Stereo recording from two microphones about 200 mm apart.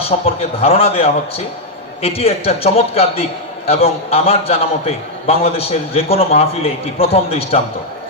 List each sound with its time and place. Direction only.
0.0 s a man's voice: 30° left (ahead or behind)